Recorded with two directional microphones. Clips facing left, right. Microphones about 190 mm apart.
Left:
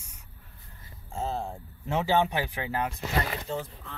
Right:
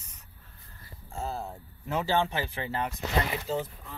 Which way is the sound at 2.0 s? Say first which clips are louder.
Left 3 dB; 15° left (ahead or behind).